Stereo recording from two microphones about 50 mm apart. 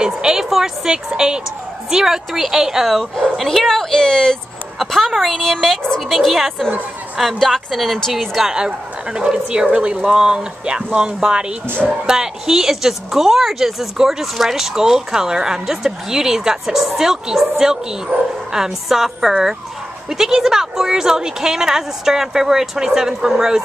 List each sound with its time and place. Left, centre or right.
0.0 s a woman's voice: centre
3.2 s speech: centre
3.9 s speech: centre
4.7 s a woman's voice: centre